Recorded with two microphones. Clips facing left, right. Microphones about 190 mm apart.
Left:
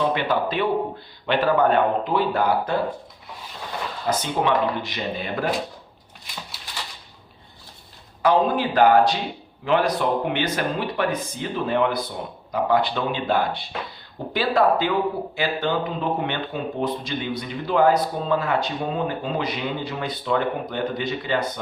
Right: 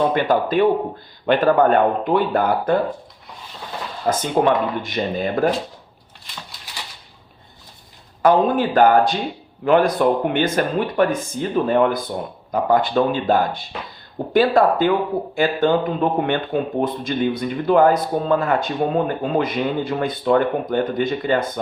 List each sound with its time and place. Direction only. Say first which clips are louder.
0.0 s speech: right 4 dB; 45° right (ahead or behind)
4.0 s speech: right 6 dB; 50° right (ahead or behind)
8.2 s speech: right 4 dB; 50° right (ahead or behind)